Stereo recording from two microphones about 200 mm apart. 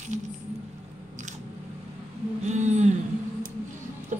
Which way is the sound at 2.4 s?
35° right (ahead or behind).